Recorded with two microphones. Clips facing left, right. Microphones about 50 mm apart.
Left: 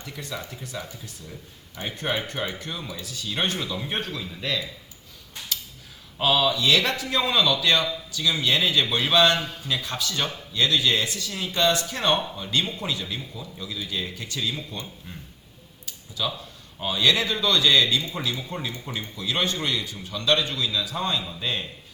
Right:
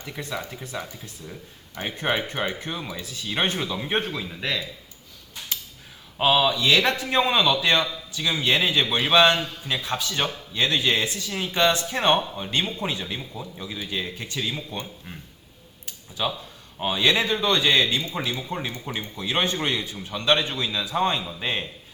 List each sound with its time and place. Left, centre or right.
0.0 s a man's voice: right
6.1 s a man's voice: right
16.2 s a man's voice: right